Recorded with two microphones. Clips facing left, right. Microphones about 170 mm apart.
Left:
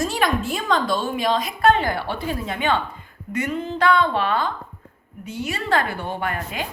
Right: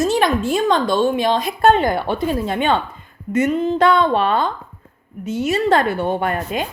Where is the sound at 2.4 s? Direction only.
30° right (ahead or behind).